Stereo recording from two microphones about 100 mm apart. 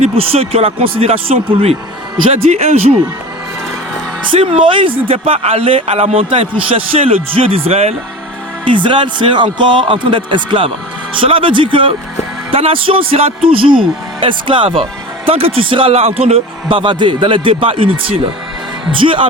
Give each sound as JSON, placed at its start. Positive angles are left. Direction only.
{"t": 0.0, "sound": "speech", "side_deg": -75}
{"t": 2.3, "sound": "speech", "side_deg": -90}
{"t": 4.3, "sound": "speech", "side_deg": -60}
{"t": 8.6, "sound": "speech", "side_deg": -55}
{"t": 15.3, "sound": "speech", "side_deg": -75}